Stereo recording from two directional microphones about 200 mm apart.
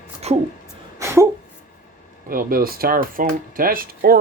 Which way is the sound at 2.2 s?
45° right (ahead or behind).